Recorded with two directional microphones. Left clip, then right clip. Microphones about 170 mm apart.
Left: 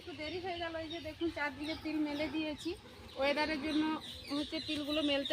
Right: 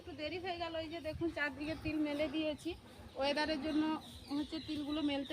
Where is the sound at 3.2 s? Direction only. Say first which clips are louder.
Left 2 dB; 55° right (ahead or behind).